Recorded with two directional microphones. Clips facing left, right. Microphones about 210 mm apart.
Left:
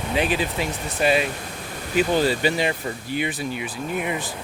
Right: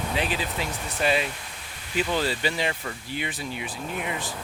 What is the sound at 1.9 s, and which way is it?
Speech, 50° left (ahead or behind).